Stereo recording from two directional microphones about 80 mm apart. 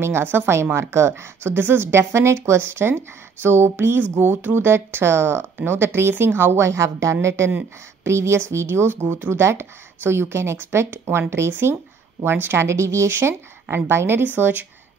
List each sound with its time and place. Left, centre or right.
0.0 s speech: right